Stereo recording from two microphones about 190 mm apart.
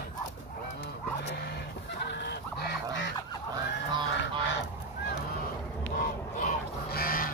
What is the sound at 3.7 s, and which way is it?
Goose, 70° left (ahead or behind).